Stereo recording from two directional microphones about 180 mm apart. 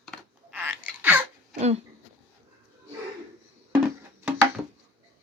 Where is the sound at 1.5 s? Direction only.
35° right (ahead or behind).